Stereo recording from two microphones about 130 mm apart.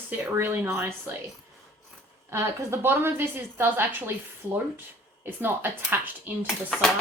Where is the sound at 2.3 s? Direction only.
20° right (ahead or behind).